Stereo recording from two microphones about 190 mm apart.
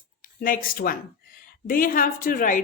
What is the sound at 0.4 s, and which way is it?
A woman's voice, 45° left (ahead or behind).